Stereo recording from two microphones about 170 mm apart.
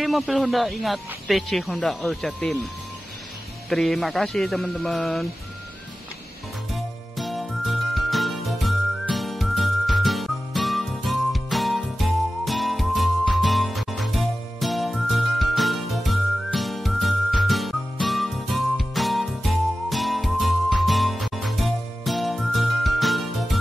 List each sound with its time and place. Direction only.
0.0 s speech: centre (ahead or behind)
3.6 s speech: centre (ahead or behind)
6.7 s music: centre (ahead or behind)